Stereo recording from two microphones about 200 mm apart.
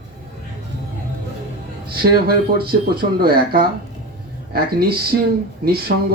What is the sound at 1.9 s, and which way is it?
Speech, 50° right (ahead or behind).